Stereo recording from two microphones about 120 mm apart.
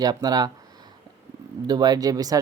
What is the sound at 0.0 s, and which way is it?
Speech, 35° right (ahead or behind).